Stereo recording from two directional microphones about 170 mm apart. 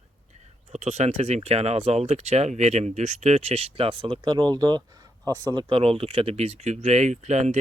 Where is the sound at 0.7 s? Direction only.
40° right (ahead or behind).